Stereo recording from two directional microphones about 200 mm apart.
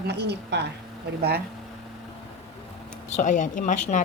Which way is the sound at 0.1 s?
55° right (ahead or behind).